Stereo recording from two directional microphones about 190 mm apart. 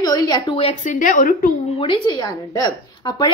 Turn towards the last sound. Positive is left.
turn(degrees=20)  # may be behind; listen again after turning